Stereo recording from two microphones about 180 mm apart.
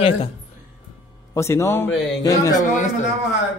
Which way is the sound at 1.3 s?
15° left (ahead or behind).